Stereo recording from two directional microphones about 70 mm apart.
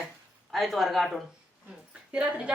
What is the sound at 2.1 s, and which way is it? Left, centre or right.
Speech, centre.